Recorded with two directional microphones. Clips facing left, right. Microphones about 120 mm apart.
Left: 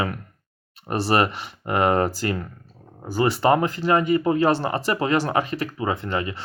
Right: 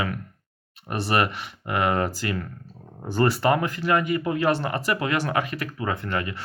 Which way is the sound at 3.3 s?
25° left (ahead or behind).